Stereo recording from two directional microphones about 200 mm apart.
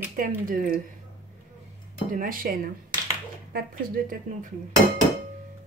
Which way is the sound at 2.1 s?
45° right (ahead or behind).